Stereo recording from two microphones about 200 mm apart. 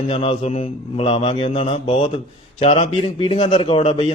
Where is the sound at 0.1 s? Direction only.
25° left (ahead or behind).